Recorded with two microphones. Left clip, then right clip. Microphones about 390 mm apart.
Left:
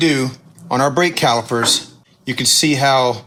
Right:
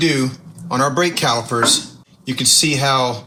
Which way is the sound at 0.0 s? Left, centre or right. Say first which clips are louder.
Left 1 dB; centre.